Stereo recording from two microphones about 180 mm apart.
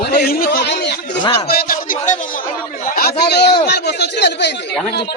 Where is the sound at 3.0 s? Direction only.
60° left (ahead or behind).